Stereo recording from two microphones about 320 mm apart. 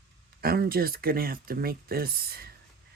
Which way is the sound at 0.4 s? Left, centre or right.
Right.